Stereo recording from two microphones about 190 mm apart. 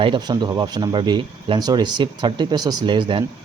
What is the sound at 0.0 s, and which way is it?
A man's voice, 25° right (ahead or behind).